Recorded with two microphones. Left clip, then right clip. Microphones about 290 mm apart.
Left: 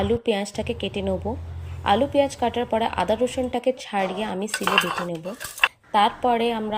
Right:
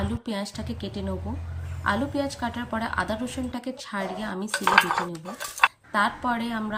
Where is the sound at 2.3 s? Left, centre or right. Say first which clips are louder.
Left 7 dB; centre.